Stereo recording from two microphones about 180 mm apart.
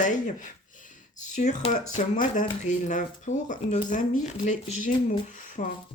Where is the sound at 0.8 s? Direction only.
45° left (ahead or behind).